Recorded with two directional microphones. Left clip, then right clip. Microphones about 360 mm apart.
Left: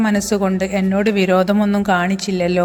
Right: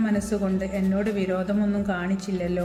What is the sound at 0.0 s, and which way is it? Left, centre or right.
A woman's voice, left.